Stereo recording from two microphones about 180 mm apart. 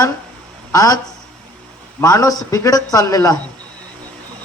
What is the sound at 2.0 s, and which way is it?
Speech, 20° left (ahead or behind).